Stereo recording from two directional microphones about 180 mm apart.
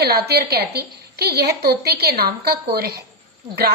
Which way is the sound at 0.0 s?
60° right (ahead or behind).